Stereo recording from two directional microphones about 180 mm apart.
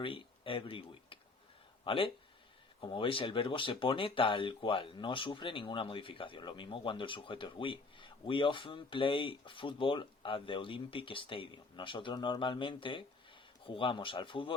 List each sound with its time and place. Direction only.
0.0 s speech: 30° left (ahead or behind)